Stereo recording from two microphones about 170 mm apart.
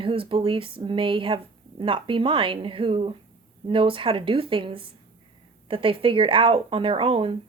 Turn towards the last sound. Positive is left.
turn(degrees=-30)  # may be behind; listen again after turning